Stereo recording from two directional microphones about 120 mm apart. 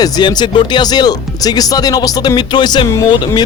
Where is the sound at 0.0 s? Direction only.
40° left (ahead or behind).